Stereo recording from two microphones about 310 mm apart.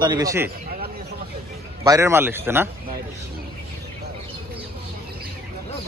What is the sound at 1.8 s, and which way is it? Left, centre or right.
Speech, centre.